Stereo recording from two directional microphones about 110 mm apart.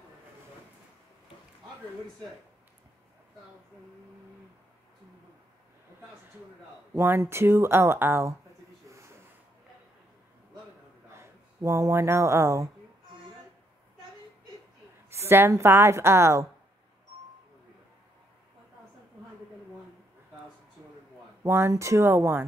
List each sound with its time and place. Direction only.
6.9 s speech: 20° right (ahead or behind)
8.8 s a sound: 25° right (ahead or behind)
11.1 s speech: 25° right (ahead or behind)
15.0 s speech: 25° right (ahead or behind)
21.4 s speech: 25° right (ahead or behind)